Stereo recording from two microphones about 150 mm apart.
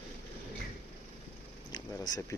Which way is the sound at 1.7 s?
25° left (ahead or behind).